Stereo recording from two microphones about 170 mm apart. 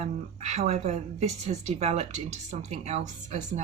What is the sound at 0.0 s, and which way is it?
Speech, 40° right (ahead or behind).